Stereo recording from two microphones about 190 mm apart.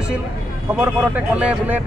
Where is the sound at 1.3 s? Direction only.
10° right (ahead or behind).